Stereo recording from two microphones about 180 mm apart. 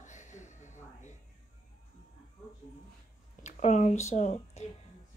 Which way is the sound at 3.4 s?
40° left (ahead or behind).